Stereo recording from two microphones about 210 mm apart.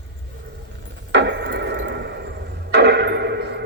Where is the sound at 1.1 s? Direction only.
55° right (ahead or behind).